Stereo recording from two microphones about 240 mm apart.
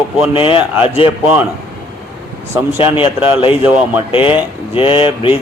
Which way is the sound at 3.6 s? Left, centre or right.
Centre.